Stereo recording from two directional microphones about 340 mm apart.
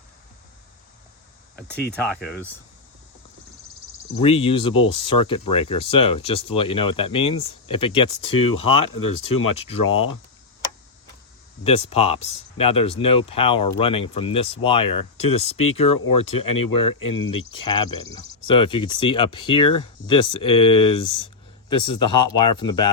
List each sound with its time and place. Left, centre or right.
1.7 s speech: left
2.0 s speech: centre
4.2 s speech: centre
8.2 s speech: left
8.5 s speech: centre
9.1 s speech: left
11.6 s speech: centre
16.4 s speech: left
17.5 s speech: centre